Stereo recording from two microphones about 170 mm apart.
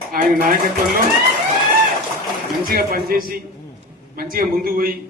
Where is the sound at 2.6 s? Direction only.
60° right (ahead or behind).